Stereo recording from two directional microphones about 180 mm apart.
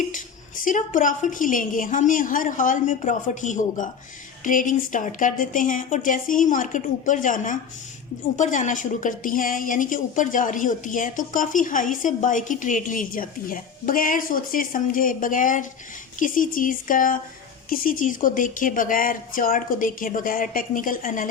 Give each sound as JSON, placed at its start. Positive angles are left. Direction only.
{"t": 0.6, "sound": "a woman's voice", "side_deg": 45}